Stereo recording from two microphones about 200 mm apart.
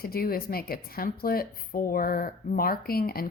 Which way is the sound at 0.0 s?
50° left (ahead or behind).